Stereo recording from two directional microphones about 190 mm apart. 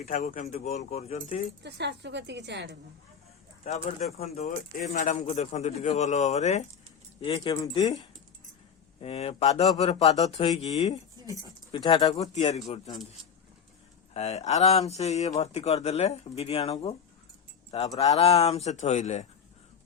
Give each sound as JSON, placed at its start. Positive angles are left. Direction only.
{"t": 0.0, "sound": "speech", "side_deg": 40}
{"t": 1.6, "sound": "a woman's voice", "side_deg": -65}
{"t": 3.6, "sound": "speech", "side_deg": 40}
{"t": 9.0, "sound": "speech", "side_deg": 30}
{"t": 14.1, "sound": "speech", "side_deg": 35}